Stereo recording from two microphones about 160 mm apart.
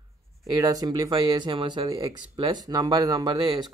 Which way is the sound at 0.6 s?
25° right (ahead or behind).